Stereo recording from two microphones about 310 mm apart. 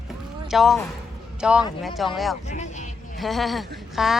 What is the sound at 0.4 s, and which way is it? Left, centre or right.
A man's voice, centre.